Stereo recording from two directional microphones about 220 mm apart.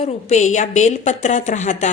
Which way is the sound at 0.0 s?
30° left (ahead or behind).